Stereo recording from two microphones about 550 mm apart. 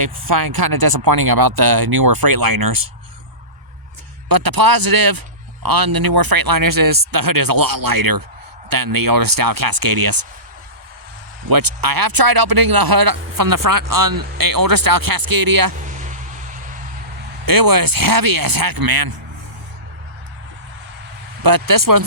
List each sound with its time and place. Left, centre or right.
0.0 s speech: right
4.3 s speech: right
11.4 s speech: right
15.9 s a sound: centre
17.4 s speech: right
21.4 s speech: right